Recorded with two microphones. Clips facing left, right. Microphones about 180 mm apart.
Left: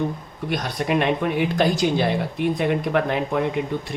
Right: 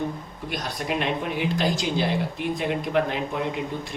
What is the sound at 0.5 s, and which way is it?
Speech, 55° left (ahead or behind).